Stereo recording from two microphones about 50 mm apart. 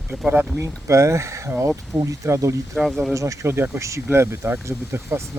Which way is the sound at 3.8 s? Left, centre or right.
Right.